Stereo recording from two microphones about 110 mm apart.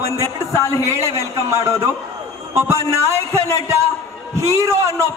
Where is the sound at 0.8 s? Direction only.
25° right (ahead or behind).